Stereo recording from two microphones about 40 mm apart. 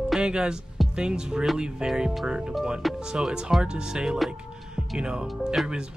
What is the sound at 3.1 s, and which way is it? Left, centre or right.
Speech, centre.